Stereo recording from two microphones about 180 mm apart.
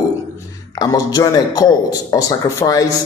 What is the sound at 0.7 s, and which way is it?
A man's voice, 20° left (ahead or behind).